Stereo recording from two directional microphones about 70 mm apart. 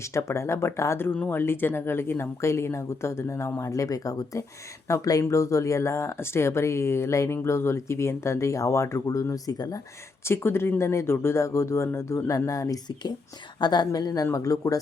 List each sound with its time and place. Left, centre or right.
0.0 s speech: left
10.2 s speech: left
13.6 s a woman's voice: left